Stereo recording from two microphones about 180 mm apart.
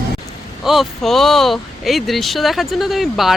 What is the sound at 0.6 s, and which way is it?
Speech, centre (ahead or behind).